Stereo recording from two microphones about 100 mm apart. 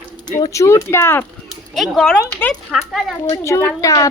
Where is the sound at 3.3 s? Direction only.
30° left (ahead or behind).